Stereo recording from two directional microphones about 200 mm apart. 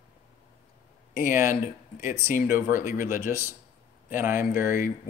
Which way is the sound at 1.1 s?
40° left (ahead or behind).